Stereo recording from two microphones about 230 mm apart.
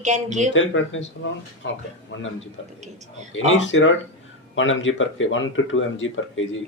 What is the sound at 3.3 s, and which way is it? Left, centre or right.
Speech, left.